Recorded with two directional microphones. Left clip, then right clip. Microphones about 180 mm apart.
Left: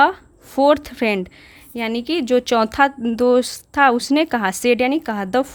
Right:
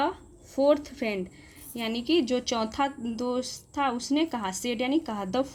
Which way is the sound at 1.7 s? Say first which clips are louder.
Left 5 dB; 45° left (ahead or behind).